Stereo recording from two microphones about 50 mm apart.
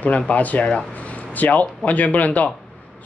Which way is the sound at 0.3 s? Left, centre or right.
Left.